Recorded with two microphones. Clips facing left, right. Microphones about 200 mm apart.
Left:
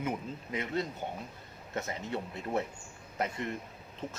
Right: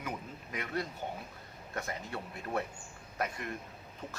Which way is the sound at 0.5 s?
20° left (ahead or behind).